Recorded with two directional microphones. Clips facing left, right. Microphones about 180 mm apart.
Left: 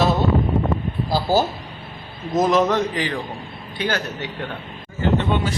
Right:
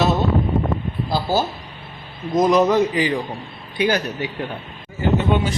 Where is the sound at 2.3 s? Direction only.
5° left (ahead or behind); by 4.3 s 15° right (ahead or behind).